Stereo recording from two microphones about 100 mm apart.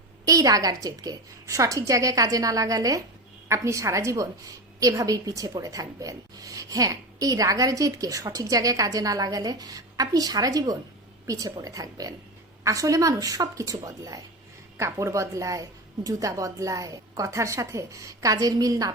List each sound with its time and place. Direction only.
0.3 s a woman's voice: 35° right (ahead or behind)